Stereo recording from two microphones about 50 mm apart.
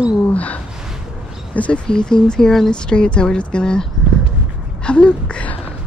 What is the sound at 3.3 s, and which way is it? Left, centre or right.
Speech, centre.